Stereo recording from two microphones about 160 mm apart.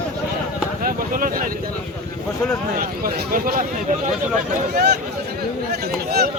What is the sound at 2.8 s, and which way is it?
Speech, 65° right (ahead or behind).